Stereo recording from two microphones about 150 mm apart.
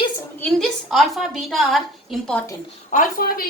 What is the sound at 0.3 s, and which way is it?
Speech, 10° left (ahead or behind).